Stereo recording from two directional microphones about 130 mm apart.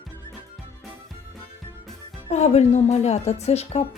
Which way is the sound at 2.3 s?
60° left (ahead or behind).